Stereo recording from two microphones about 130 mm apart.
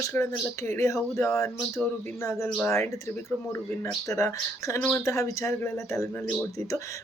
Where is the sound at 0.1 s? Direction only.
15° left (ahead or behind).